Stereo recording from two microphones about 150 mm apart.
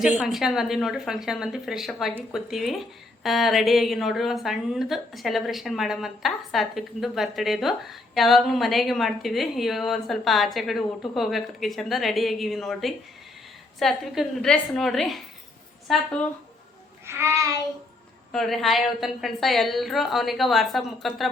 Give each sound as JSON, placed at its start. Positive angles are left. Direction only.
{"t": 0.0, "sound": "a woman's voice", "side_deg": -5}
{"t": 17.1, "sound": "a sound", "side_deg": -20}
{"t": 18.3, "sound": "a woman's voice", "side_deg": 0}